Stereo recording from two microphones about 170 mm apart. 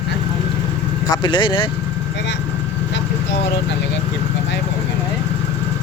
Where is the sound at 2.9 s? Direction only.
85° left.